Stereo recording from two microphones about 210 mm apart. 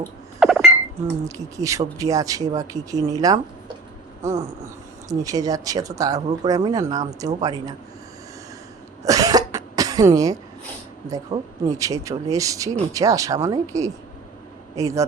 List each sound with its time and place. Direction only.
0.3 s a sound: centre (ahead or behind)
1.2 s speech: 15° right (ahead or behind)
9.0 s cough: 15° right (ahead or behind)
11.3 s speech: 15° right (ahead or behind)